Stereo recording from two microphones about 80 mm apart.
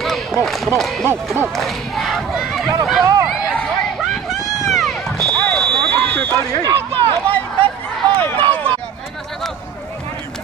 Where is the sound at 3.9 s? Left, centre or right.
Centre.